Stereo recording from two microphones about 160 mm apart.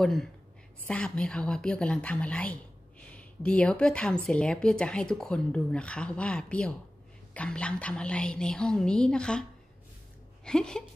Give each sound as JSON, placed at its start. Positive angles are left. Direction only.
{"t": 0.0, "sound": "a woman's voice", "side_deg": 0}
{"t": 10.4, "sound": "a woman's voice", "side_deg": 5}